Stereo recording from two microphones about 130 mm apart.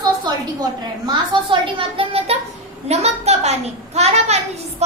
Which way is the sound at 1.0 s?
40° right (ahead or behind).